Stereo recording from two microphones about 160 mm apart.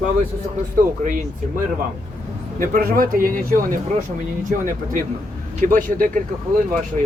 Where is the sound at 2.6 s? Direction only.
65° right (ahead or behind).